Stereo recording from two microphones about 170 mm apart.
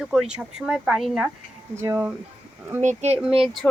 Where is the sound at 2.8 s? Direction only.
40° right (ahead or behind).